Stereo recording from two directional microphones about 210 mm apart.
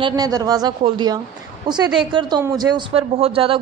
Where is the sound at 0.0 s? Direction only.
20° right (ahead or behind).